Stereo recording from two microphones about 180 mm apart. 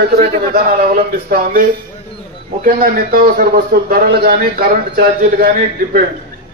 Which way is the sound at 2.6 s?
50° right (ahead or behind).